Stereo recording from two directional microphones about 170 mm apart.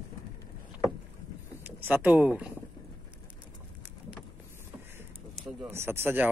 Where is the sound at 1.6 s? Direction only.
10° right (ahead or behind).